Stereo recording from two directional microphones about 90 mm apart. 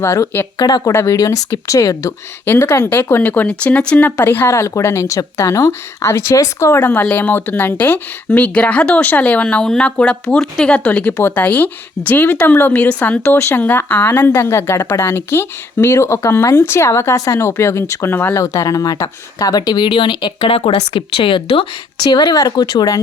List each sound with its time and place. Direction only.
0.0 s a woman's voice: 35° left (ahead or behind)
0.9 s a woman's voice: 35° left (ahead or behind)
2.4 s a woman's voice: 25° left (ahead or behind)
18.3 s speech: 35° left (ahead or behind); by 21.7 s 85° left
22.0 s speech: 55° left (ahead or behind)